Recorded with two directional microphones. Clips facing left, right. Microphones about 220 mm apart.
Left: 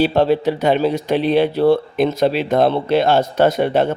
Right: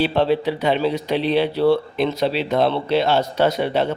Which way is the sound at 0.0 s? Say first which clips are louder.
Left 3 dB; 45° left (ahead or behind).